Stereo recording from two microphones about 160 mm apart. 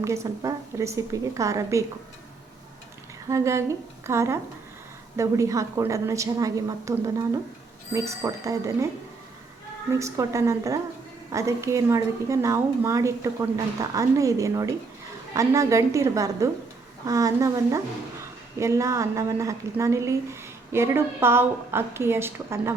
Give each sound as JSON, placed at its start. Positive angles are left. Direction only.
{"t": 0.0, "sound": "a woman's voice", "side_deg": -20}
{"t": 3.2, "sound": "a woman's voice", "side_deg": -20}
{"t": 10.0, "sound": "a woman's voice", "side_deg": -20}